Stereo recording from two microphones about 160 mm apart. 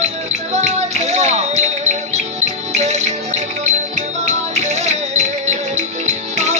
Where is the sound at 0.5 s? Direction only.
45° right (ahead or behind).